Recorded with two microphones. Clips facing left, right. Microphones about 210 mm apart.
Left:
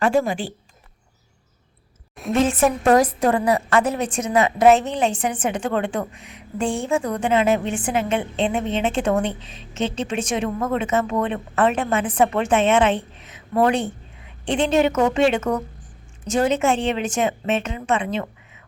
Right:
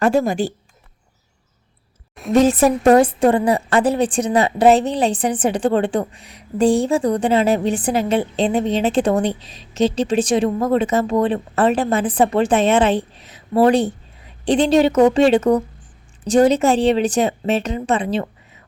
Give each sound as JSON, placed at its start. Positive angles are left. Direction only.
{"t": 0.0, "sound": "a woman's voice", "side_deg": -40}
{"t": 2.3, "sound": "a woman's voice", "side_deg": -40}